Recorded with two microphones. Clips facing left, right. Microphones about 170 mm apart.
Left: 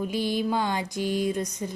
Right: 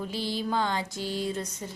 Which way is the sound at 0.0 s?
15° left (ahead or behind).